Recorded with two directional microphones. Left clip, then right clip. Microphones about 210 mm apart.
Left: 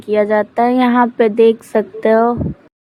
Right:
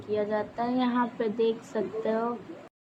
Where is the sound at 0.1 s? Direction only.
40° left (ahead or behind).